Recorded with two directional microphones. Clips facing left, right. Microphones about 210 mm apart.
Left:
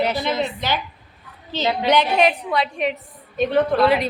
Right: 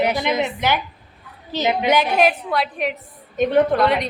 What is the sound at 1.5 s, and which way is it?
Speech, 20° right (ahead or behind).